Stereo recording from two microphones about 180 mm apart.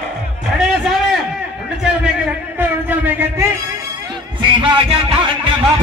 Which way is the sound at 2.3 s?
10° right (ahead or behind).